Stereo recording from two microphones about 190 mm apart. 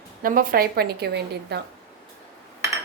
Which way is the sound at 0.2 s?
50° right (ahead or behind).